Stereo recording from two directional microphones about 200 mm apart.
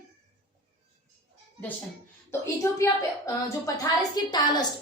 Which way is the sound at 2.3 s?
15° left (ahead or behind).